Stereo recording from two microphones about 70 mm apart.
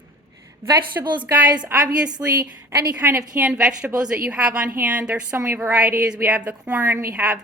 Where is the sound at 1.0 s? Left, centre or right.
Right.